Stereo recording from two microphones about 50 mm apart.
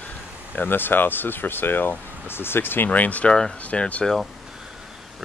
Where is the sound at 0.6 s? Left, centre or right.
Left.